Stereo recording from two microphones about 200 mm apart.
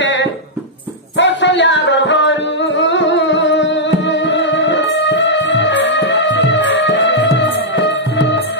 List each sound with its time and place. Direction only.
0.0 s music: 65° left (ahead or behind)